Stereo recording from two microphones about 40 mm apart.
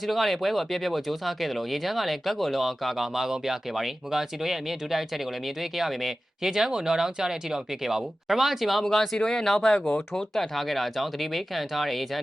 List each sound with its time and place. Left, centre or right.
0.0 s speech: centre
8.8 s speech: centre